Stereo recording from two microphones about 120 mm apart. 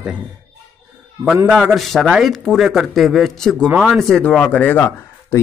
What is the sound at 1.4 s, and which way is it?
A man's voice, 5° right (ahead or behind).